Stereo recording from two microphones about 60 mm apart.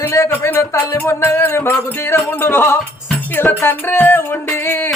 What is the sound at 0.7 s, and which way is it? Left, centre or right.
Music, left.